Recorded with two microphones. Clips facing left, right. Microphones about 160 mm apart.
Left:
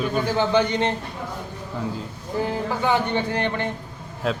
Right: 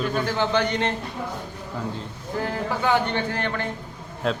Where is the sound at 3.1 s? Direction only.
20° left (ahead or behind).